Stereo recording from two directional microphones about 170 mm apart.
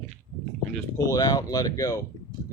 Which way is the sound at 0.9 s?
20° left (ahead or behind).